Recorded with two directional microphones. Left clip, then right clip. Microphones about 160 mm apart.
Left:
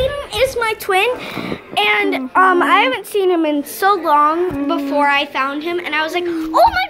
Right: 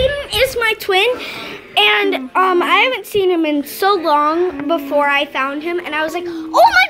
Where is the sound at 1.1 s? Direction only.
20° right (ahead or behind); by 3.6 s centre (ahead or behind).